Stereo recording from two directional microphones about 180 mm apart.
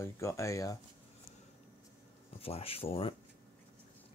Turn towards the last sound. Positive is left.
turn(degrees=30)  # may be behind; listen again after turning